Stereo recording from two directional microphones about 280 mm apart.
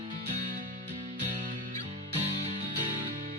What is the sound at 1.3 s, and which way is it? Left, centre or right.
Music, right.